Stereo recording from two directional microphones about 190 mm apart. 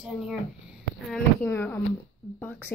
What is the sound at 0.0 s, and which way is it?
Speech, 5° right (ahead or behind).